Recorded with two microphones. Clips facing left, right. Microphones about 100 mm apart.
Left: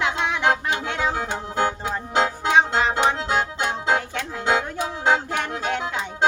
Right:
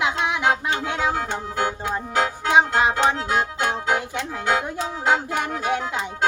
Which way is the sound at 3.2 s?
25° left (ahead or behind).